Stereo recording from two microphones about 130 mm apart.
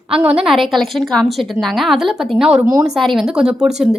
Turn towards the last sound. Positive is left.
turn(degrees=-5)  # may be behind; listen again after turning